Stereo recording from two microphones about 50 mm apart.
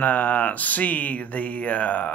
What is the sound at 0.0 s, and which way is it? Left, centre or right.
Speech, left.